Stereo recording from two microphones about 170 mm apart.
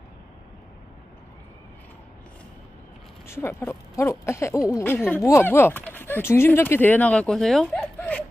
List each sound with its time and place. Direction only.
3.2 s speech: 15° left (ahead or behind)